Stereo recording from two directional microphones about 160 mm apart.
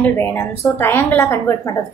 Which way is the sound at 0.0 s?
10° left (ahead or behind).